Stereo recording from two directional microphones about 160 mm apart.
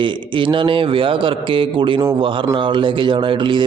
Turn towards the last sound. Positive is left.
turn(degrees=-30)  # may be behind; listen again after turning